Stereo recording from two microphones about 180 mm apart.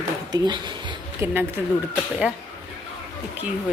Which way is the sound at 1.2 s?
10° right (ahead or behind).